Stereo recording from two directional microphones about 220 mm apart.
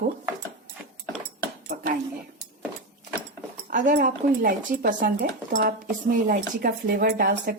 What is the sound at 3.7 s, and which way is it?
Speech, 35° right (ahead or behind).